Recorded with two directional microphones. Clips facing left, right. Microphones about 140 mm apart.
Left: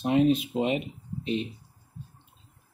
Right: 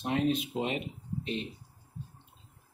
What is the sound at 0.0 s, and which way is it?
Speech, 10° left (ahead or behind).